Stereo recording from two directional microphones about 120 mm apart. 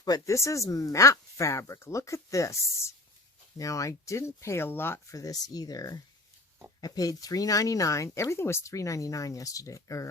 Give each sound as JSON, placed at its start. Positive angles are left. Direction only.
{"t": 0.0, "sound": "speech", "side_deg": 30}